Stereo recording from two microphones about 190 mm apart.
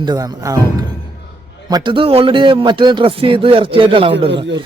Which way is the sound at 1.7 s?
25° right (ahead or behind).